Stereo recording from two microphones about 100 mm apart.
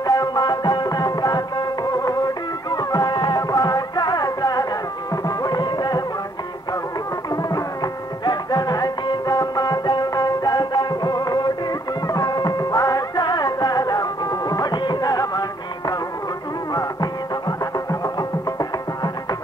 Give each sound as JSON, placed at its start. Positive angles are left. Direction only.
{"t": 0.0, "sound": "music", "side_deg": 40}
{"t": 7.2, "sound": "music", "side_deg": 40}
{"t": 16.7, "sound": "music", "side_deg": 40}